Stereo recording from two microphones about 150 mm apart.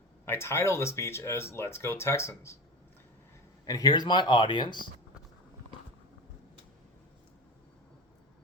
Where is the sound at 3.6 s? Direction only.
25° left (ahead or behind).